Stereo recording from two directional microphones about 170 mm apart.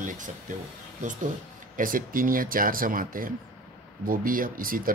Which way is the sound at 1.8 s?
55° right (ahead or behind).